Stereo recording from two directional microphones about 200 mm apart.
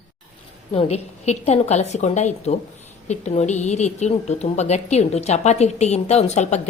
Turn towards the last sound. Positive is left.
turn(degrees=35)  # may be behind; listen again after turning